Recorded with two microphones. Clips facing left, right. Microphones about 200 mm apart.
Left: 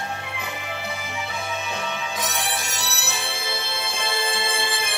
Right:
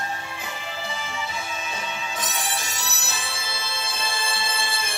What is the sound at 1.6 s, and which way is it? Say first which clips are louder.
Music: left 3 dB; 60° left (ahead or behind).